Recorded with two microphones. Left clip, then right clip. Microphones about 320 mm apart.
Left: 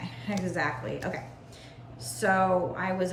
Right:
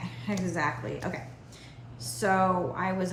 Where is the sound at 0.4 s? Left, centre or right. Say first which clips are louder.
Even; centre.